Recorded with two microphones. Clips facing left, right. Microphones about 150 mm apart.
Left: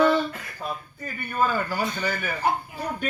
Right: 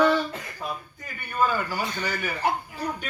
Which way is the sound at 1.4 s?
45° left (ahead or behind).